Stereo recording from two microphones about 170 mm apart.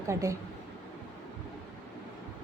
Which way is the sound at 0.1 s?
15° right (ahead or behind).